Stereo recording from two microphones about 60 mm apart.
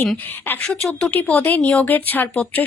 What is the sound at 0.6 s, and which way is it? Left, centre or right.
Speech, centre.